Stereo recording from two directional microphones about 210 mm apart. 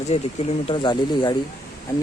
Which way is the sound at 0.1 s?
30° left (ahead or behind).